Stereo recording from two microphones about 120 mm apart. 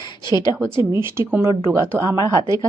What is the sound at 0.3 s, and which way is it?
Speech, 40° left (ahead or behind).